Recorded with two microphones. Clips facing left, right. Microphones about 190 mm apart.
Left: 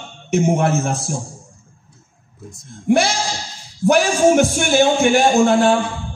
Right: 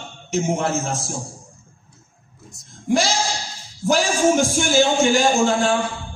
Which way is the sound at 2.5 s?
55° left (ahead or behind).